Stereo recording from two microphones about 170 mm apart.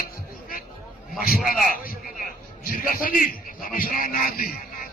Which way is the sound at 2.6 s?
55° left (ahead or behind).